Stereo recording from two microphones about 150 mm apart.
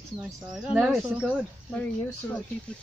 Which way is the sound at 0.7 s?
5° right (ahead or behind).